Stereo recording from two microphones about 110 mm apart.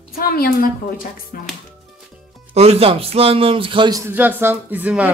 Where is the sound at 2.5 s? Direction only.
70° right (ahead or behind); by 3.9 s 50° right (ahead or behind).